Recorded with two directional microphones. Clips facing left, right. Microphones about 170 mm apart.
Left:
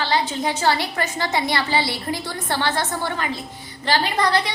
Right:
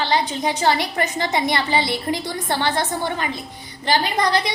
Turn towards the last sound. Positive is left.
turn(degrees=-15)  # may be behind; listen again after turning